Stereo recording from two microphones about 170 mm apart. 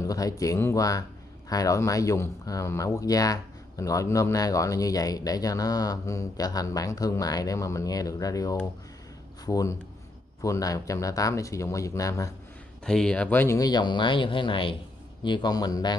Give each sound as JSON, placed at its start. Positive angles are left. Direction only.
{"t": 0.0, "sound": "speech", "side_deg": 20}
{"t": 12.8, "sound": "speech", "side_deg": 5}